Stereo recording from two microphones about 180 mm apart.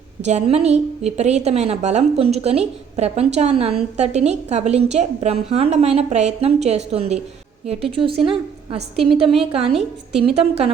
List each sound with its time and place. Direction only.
0.3 s a woman's voice: 35° right (ahead or behind)